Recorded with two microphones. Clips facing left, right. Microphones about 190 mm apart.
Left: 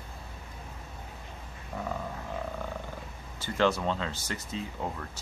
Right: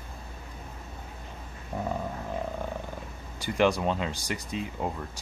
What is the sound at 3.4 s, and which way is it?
Speech, 15° right (ahead or behind).